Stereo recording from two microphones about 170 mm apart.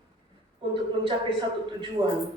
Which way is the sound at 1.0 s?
30° right (ahead or behind).